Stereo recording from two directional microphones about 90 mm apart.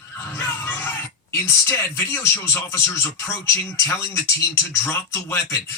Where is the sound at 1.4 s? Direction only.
25° left (ahead or behind).